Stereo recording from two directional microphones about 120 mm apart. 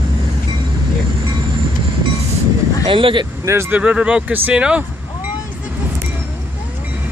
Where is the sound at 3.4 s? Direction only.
25° right (ahead or behind).